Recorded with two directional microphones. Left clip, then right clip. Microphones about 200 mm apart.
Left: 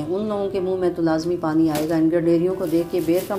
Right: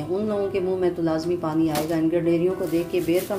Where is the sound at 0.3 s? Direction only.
15° left (ahead or behind).